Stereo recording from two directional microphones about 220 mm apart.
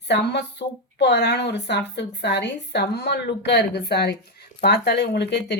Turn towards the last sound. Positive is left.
turn(degrees=50)  # may be behind; listen again after turning